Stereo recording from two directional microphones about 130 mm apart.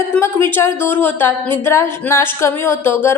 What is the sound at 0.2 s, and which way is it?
A woman's voice, 20° left (ahead or behind).